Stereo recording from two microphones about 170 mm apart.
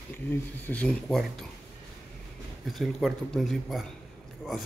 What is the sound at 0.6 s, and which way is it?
Speech, 10° left (ahead or behind).